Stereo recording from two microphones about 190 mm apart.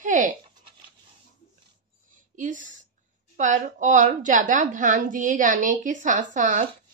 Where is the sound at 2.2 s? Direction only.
40° right (ahead or behind).